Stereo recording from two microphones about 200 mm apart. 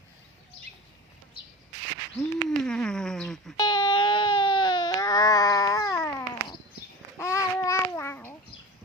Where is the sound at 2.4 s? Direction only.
5° left (ahead or behind).